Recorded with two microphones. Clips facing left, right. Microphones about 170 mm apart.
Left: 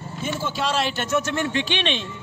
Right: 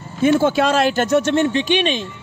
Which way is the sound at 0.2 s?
60° right (ahead or behind).